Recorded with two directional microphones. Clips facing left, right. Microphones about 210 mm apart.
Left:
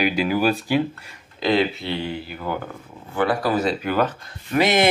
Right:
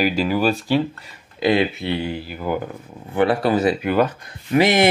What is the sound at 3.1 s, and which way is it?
Speech, 25° right (ahead or behind).